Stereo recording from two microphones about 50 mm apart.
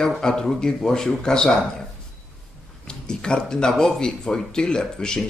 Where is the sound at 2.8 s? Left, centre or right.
Centre.